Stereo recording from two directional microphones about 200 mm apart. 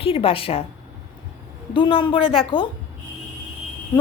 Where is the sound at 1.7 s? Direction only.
25° left (ahead or behind).